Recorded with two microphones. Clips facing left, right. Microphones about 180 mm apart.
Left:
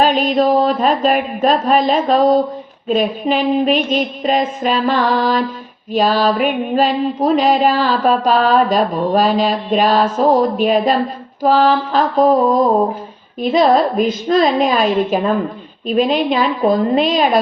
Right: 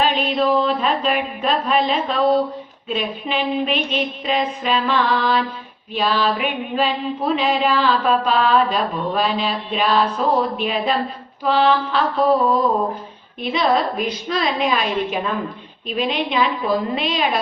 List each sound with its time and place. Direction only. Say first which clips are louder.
0.0 s mantra: left 5 dB; 45° left (ahead or behind)